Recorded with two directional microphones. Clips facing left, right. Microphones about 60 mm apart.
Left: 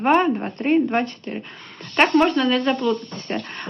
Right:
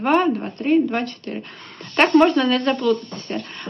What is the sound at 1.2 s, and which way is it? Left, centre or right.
Speech, centre.